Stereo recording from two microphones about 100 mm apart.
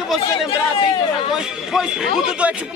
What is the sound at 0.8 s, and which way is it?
Speech, 50° left (ahead or behind).